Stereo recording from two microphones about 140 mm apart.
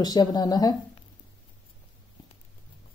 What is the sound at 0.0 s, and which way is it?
Speech, 30° left (ahead or behind).